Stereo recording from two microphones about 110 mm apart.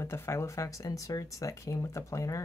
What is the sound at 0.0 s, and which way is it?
Speech, 25° left (ahead or behind).